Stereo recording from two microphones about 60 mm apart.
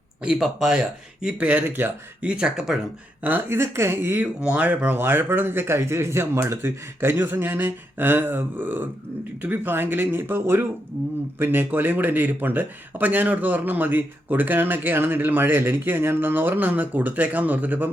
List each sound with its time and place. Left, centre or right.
0.3 s speech: centre; by 1.9 s right
2.2 s speech: centre
3.5 s speech: right
4.5 s speech: right
4.9 s a man's voice: right